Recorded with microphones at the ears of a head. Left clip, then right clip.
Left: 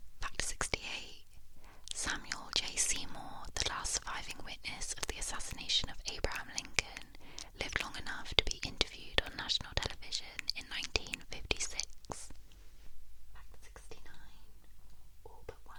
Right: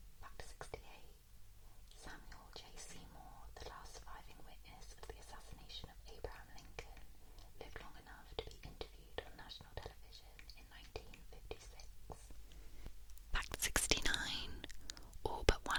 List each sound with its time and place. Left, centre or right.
0.2 s whispering: left
13.3 s whispering: right